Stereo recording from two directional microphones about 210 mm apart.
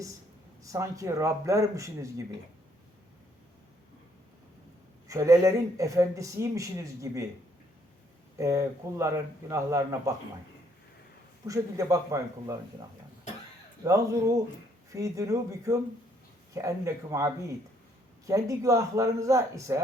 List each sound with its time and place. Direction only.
0.6 s speech: 15° right (ahead or behind)
5.0 s speech: 15° right (ahead or behind)
8.4 s speech: 15° right (ahead or behind)
11.4 s speech: 15° right (ahead or behind)
13.8 s speech: 15° right (ahead or behind)